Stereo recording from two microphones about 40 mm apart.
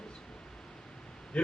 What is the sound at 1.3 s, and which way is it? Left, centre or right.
Speech, left.